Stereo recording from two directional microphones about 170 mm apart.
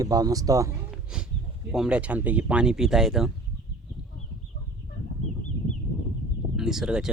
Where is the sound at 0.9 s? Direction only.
5° right (ahead or behind).